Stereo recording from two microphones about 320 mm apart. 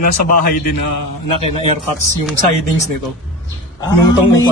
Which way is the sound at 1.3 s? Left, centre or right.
Centre.